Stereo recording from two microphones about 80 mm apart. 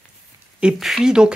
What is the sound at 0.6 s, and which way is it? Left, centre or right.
Speech, centre.